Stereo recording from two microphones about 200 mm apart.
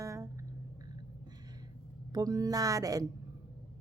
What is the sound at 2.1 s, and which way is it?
Speech, 20° right (ahead or behind).